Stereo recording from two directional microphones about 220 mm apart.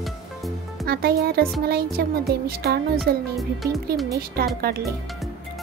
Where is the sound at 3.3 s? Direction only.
Centre (ahead or behind).